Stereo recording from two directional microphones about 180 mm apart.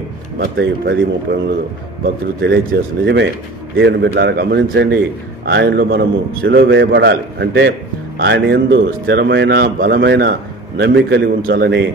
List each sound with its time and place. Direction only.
0.4 s a man's voice: 70° right (ahead or behind)
2.4 s a man's voice: 70° right (ahead or behind)
11.4 s a man's voice: 60° right (ahead or behind)